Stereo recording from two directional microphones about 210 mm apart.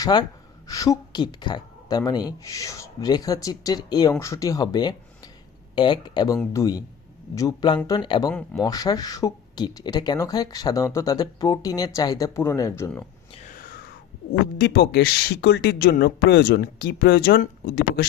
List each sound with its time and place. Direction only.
0.0 s speech: 20° left (ahead or behind)
8.3 s speech: 5° left (ahead or behind)
8.6 s speech: 15° left (ahead or behind)
13.4 s a sound: 40° left (ahead or behind)
14.6 s speech: 50° left (ahead or behind)